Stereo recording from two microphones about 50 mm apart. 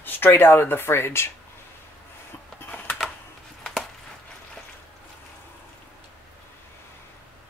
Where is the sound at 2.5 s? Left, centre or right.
Left.